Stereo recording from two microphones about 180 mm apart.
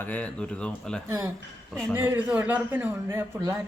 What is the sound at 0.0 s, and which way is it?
Speech, 10° left (ahead or behind).